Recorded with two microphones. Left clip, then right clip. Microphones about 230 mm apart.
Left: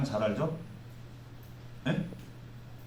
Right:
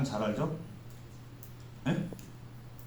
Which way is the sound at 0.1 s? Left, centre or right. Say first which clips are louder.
Left 5 dB; left.